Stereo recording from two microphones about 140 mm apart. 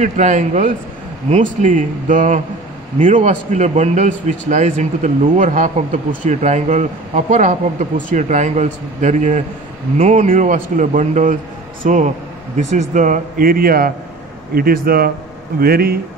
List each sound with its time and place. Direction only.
0.0 s a man's voice: 60° right (ahead or behind); by 16.0 s 90° right